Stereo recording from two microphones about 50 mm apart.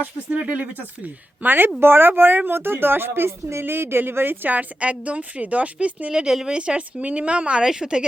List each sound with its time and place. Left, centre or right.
0.4 s a woman's voice: right; by 6.6 s centre
6.6 s a woman's voice: right
7.6 s a woman's voice: centre